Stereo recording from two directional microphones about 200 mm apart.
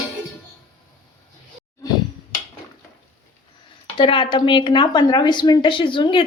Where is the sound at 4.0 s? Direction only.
25° left (ahead or behind).